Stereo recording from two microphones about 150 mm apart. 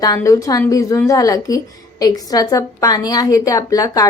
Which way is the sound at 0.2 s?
20° left (ahead or behind).